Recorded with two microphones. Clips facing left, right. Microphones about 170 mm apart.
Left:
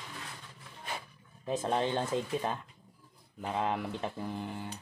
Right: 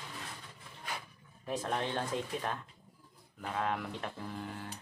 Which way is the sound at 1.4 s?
20° left (ahead or behind).